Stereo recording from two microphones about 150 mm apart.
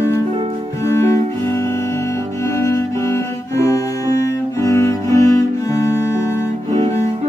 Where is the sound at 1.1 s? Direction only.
20° left (ahead or behind).